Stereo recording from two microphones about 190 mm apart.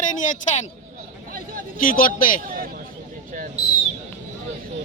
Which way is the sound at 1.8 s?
50° left (ahead or behind).